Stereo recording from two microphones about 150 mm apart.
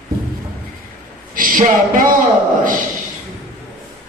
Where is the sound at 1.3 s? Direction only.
70° right (ahead or behind).